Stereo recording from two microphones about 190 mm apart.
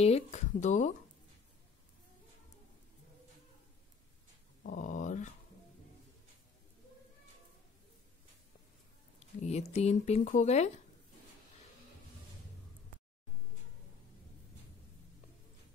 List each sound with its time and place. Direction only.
0.0 s speech: 35° left (ahead or behind)
4.6 s speech: 40° left (ahead or behind)
9.4 s speech: 35° left (ahead or behind)